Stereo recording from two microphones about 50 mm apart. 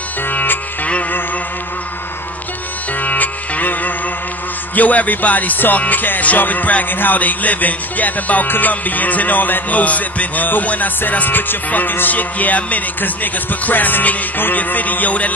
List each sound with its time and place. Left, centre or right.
0.3 s music: left
3.0 s music: left